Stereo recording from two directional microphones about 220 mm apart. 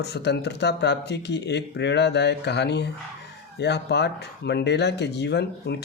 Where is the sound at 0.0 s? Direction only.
50° left (ahead or behind).